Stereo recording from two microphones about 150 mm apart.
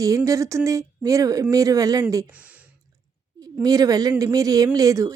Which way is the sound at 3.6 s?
25° right (ahead or behind).